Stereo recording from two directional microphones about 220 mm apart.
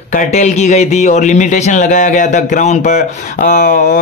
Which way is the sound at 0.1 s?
35° left (ahead or behind).